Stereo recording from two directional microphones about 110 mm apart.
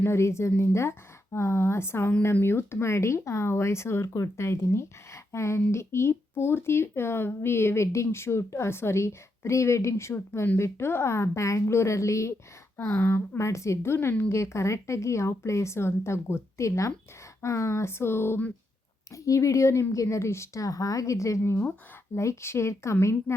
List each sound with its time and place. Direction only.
0.0 s speech: 25° left (ahead or behind)
19.1 s speech: 30° left (ahead or behind)